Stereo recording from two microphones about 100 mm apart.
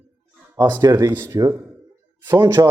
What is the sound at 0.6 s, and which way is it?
A man's voice, 30° right (ahead or behind).